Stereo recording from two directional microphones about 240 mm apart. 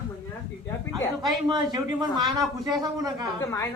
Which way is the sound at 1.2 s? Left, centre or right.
Centre.